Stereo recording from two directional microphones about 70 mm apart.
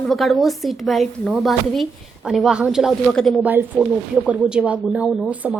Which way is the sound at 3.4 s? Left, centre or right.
Right.